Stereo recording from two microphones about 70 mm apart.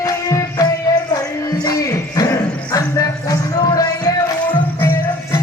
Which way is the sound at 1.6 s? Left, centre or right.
Left.